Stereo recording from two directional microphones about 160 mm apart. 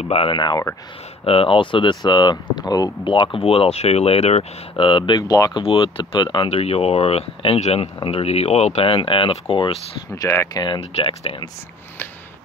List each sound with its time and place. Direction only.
0.1 s speech: 35° left (ahead or behind)
10.1 s speech: 20° left (ahead or behind); by 11.4 s 35° left (ahead or behind)